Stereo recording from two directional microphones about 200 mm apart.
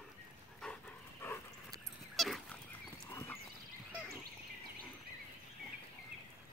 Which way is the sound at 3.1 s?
15° left (ahead or behind).